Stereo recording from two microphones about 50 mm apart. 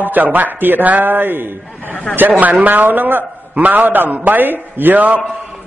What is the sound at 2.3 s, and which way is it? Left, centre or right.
A man's voice, right.